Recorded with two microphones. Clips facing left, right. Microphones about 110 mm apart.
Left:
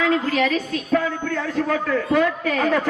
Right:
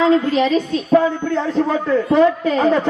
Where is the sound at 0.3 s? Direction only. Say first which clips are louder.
Right 5 dB; 25° right (ahead or behind).